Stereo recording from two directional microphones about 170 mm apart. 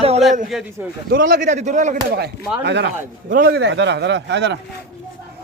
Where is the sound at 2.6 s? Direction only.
90° right.